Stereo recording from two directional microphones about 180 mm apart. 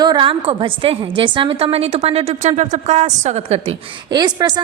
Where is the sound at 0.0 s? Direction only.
25° right (ahead or behind).